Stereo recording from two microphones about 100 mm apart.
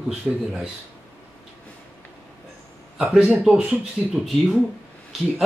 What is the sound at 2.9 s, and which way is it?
Speech, centre (ahead or behind).